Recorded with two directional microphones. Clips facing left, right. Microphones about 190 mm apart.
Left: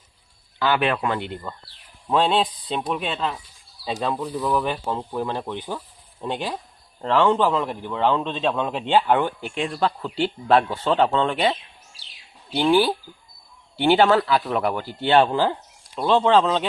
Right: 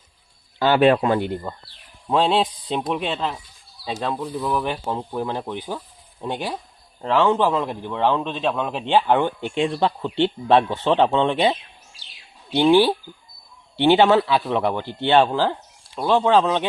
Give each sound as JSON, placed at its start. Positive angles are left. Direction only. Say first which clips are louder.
{"t": 0.9, "sound": "speech", "louder": "right 5 dB", "side_deg": -30}
{"t": 2.0, "sound": "speech", "louder": "right 1 dB", "side_deg": -5}
{"t": 4.6, "sound": "a man's voice", "louder": "even", "side_deg": -15}
{"t": 9.4, "sound": "speech", "louder": "right 3 dB", "side_deg": -25}
{"t": 12.6, "sound": "speech", "louder": "right 3 dB", "side_deg": -25}
{"t": 13.8, "sound": "speech", "louder": "right 2 dB", "side_deg": 0}
{"t": 15.1, "sound": "a man's voice", "louder": "even", "side_deg": -10}